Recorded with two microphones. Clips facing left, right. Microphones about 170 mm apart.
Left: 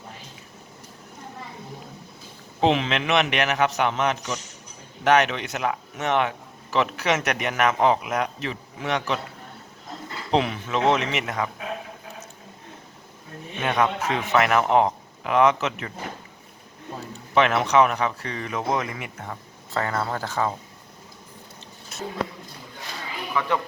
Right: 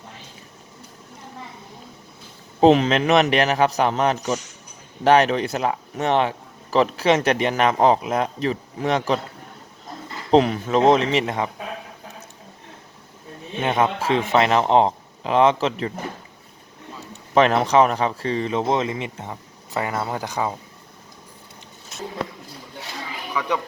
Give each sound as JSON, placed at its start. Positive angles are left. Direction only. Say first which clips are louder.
{"t": 2.6, "sound": "speech", "louder": "right 7 dB", "side_deg": -40}
{"t": 10.3, "sound": "speech", "louder": "right 7 dB", "side_deg": -40}
{"t": 13.6, "sound": "a man's voice", "louder": "right 2 dB", "side_deg": -25}
{"t": 17.3, "sound": "speech", "louder": "right 3 dB", "side_deg": -35}